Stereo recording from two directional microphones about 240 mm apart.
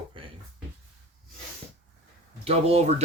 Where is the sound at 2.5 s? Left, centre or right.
Right.